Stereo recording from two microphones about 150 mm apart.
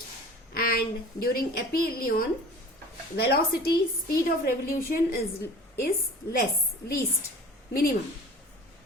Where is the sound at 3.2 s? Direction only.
90° left.